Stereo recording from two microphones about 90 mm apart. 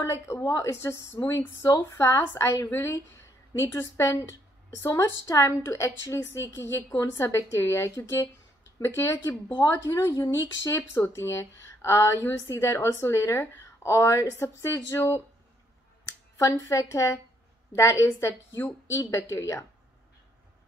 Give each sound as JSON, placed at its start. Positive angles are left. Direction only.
{"t": 0.0, "sound": "speech", "side_deg": 35}
{"t": 9.6, "sound": "speech", "side_deg": 45}
{"t": 16.3, "sound": "speech", "side_deg": 35}
{"t": 18.0, "sound": "a woman's voice", "side_deg": 25}
{"t": 19.0, "sound": "speech", "side_deg": 40}